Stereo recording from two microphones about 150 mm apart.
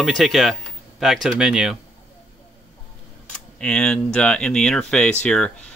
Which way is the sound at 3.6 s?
5° left (ahead or behind).